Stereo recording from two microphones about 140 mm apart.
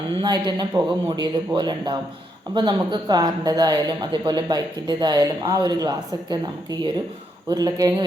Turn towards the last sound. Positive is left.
turn(degrees=-25)  # may be behind; listen again after turning